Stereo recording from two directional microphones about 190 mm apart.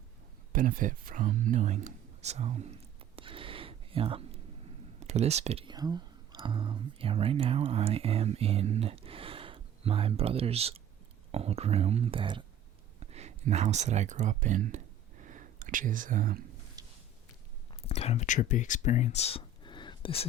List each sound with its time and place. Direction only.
0.5 s speech: 45° right (ahead or behind)
3.2 s a sound: 25° right (ahead or behind)
4.9 s speech: 35° right (ahead or behind)
15.2 s whispering: 40° right (ahead or behind)
16.8 s a sound: 20° right (ahead or behind)
17.8 s speech: 35° left (ahead or behind)